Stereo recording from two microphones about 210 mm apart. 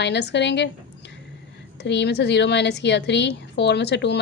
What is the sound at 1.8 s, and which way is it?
A woman's voice, 55° left (ahead or behind).